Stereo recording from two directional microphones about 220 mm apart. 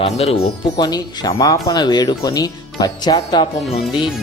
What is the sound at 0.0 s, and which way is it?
Speech, 25° left (ahead or behind).